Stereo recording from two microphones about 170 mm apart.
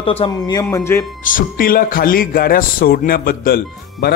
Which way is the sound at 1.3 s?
55° left (ahead or behind).